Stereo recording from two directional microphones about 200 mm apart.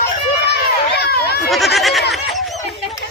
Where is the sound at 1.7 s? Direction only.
Centre (ahead or behind).